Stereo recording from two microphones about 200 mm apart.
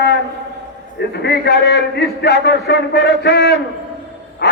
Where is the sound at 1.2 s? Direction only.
55° left (ahead or behind).